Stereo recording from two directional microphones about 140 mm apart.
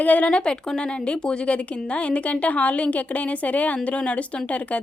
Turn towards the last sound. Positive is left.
turn(degrees=10)  # may be behind; listen again after turning